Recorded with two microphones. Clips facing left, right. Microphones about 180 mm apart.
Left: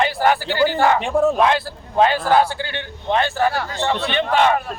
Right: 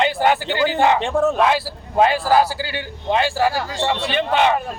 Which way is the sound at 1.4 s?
5° right (ahead or behind).